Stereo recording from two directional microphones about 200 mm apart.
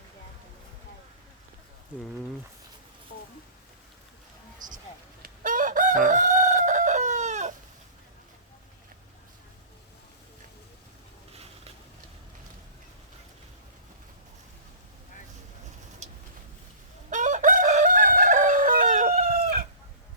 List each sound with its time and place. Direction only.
5.2 s chicken: 45° right (ahead or behind)
16.0 s a sound: 35° right (ahead or behind)
17.1 s chicken: 40° right (ahead or behind)